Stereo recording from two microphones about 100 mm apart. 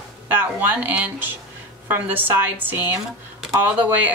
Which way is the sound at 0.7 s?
15° right (ahead or behind).